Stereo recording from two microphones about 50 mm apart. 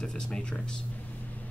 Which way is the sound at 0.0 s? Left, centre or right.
Centre.